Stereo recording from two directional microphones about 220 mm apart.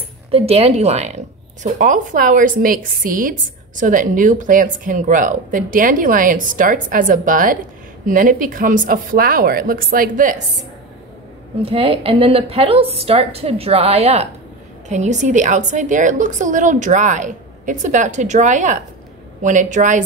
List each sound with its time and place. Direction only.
0.3 s a woman's voice: 25° right (ahead or behind)
11.6 s a woman's voice: 25° right (ahead or behind)